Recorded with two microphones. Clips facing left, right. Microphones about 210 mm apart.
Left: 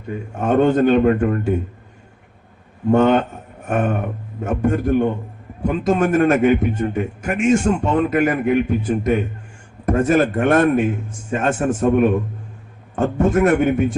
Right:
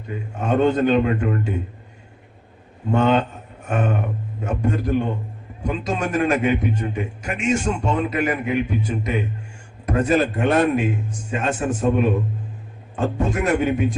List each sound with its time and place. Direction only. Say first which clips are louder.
0.3 s a man's voice: left 3 dB; 50° left (ahead or behind)
2.9 s a man's voice: left 4 dB; 50° left (ahead or behind)